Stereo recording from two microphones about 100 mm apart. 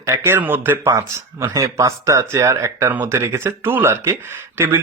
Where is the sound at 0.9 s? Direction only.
30° right (ahead or behind).